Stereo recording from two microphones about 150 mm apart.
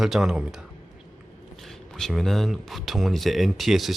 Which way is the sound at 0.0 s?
5° right (ahead or behind).